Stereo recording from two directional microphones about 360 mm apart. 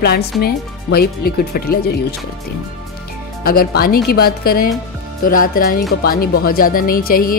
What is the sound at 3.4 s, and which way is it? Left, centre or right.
Speech, left.